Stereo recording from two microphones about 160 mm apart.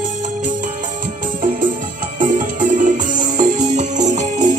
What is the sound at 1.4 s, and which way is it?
Music, 55° right (ahead or behind).